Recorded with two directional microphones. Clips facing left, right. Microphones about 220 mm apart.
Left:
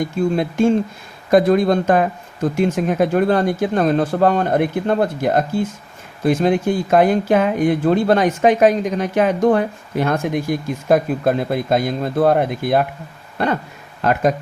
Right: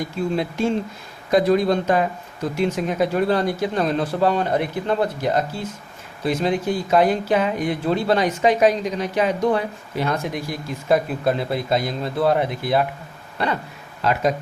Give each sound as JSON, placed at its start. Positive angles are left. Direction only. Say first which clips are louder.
{"t": 0.3, "sound": "speech", "louder": "left 6 dB", "side_deg": 50}